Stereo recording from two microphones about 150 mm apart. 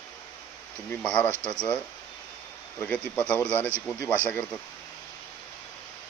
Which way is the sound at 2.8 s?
10° left (ahead or behind).